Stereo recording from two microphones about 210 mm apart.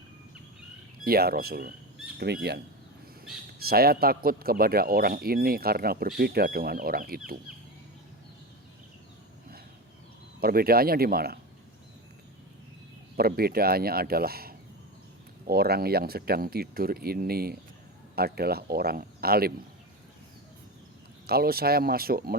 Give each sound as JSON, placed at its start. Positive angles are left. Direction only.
{"t": 1.0, "sound": "speech", "side_deg": -45}
{"t": 3.6, "sound": "speech", "side_deg": -45}
{"t": 10.4, "sound": "speech", "side_deg": -45}
{"t": 13.1, "sound": "speech", "side_deg": -45}
{"t": 21.2, "sound": "speech", "side_deg": -45}